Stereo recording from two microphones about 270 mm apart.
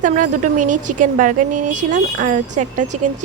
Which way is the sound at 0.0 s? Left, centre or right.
Right.